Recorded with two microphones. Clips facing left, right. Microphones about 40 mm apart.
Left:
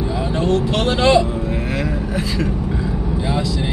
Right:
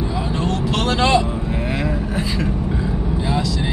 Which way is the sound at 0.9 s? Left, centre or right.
Centre.